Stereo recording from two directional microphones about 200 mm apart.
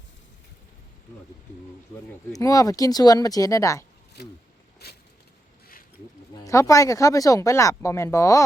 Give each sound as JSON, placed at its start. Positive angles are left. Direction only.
{"t": 2.3, "sound": "speech", "side_deg": 15}
{"t": 4.2, "sound": "speech", "side_deg": 55}
{"t": 6.3, "sound": "speech", "side_deg": 15}